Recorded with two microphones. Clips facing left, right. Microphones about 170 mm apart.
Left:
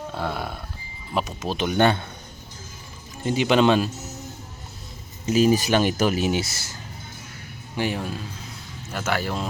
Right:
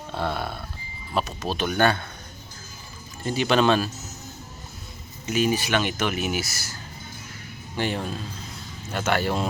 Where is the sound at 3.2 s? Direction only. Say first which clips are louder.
Left 2 dB; 20° left (ahead or behind).